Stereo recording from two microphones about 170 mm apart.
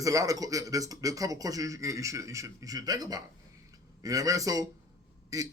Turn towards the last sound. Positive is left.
turn(degrees=-20)  # may be behind; listen again after turning